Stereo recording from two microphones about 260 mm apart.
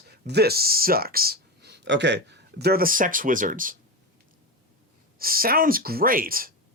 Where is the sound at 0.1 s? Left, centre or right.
Right.